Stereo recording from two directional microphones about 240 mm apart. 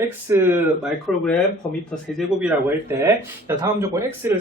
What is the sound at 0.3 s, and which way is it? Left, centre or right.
Speech, centre.